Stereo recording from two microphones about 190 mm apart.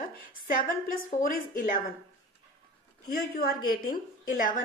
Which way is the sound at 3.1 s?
55° left (ahead or behind).